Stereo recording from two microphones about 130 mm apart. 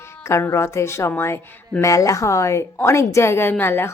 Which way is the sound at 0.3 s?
20° left (ahead or behind).